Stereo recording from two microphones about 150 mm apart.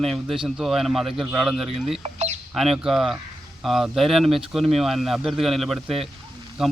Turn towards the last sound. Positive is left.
turn(degrees=0)  # may be behind; listen again after turning